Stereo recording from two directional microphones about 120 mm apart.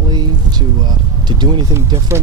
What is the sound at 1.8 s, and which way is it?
Speech, 25° right (ahead or behind).